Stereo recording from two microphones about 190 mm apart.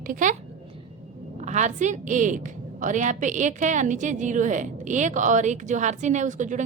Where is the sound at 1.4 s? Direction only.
40° right (ahead or behind).